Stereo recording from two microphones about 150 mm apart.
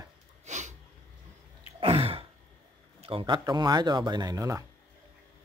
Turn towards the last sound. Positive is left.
turn(degrees=-20)  # may be behind; listen again after turning